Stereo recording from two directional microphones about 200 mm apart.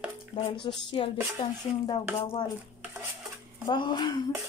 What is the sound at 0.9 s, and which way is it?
A woman's voice, 25° left (ahead or behind).